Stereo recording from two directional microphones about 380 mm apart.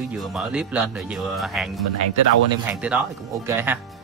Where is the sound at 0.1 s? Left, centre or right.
Centre.